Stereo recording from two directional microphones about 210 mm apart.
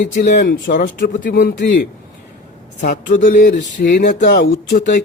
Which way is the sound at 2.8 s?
40° left (ahead or behind).